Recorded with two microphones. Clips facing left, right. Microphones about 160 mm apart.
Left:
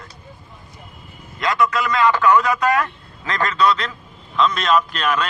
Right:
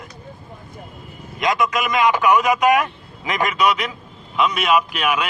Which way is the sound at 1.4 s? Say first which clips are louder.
Even; 15° right (ahead or behind).